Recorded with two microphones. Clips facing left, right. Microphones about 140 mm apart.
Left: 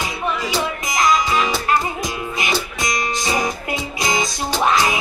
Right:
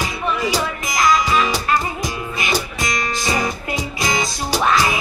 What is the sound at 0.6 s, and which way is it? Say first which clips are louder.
Music: even; 20° left (ahead or behind).